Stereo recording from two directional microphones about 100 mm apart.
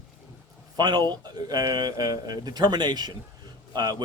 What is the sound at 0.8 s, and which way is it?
Speech, 45° right (ahead or behind).